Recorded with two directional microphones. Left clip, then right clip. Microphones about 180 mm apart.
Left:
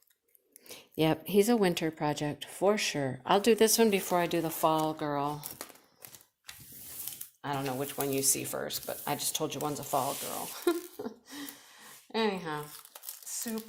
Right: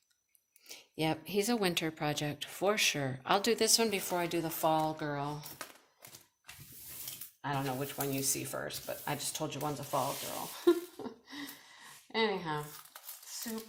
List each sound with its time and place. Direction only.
0.7 s speech: 35° left (ahead or behind)
7.7 s speech: 40° left (ahead or behind)